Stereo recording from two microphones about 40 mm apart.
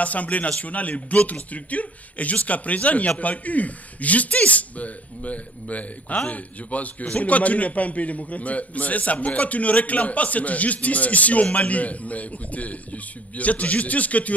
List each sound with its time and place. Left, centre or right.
0.0 s speech: left